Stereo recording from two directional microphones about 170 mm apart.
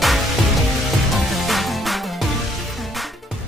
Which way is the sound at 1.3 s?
Centre (ahead or behind).